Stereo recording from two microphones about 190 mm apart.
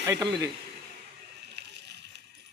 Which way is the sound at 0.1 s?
20° right (ahead or behind).